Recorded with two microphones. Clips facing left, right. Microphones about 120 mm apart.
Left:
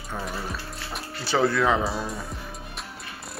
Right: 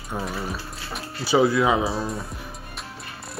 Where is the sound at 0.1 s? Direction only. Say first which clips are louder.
Right 4 dB; 15° right (ahead or behind).